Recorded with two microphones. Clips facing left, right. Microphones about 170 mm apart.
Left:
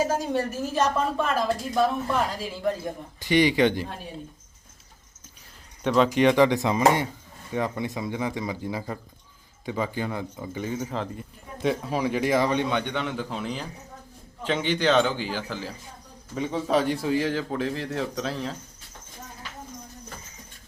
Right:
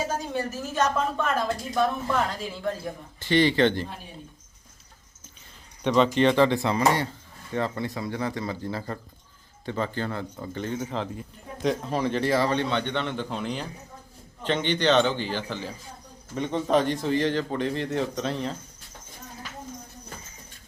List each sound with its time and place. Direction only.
0.8 s speech: 10° left (ahead or behind)
5.8 s a man's voice: 5° left (ahead or behind)